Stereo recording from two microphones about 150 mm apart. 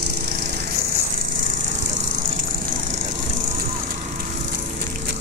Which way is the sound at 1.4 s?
60° right (ahead or behind).